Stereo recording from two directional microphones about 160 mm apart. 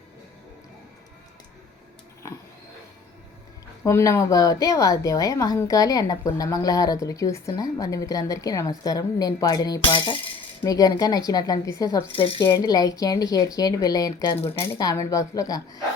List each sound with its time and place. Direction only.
3.8 s a woman's voice: 20° left (ahead or behind)
12.1 s speech: 35° left (ahead or behind)
12.5 s a woman's voice: 25° left (ahead or behind)